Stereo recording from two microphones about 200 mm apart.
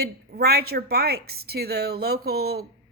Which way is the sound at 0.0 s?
50° right (ahead or behind).